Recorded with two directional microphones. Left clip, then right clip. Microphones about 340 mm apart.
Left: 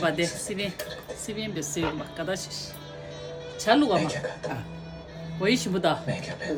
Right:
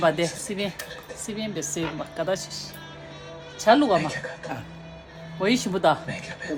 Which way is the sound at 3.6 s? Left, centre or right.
Centre.